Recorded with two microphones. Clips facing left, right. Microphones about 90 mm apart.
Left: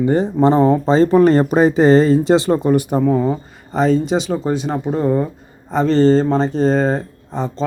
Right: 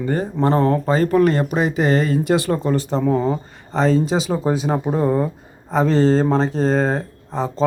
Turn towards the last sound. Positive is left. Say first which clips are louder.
# even
turn(degrees=0)  # may be behind; listen again after turning